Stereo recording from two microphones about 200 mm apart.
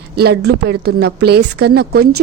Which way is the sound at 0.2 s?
55° right (ahead or behind).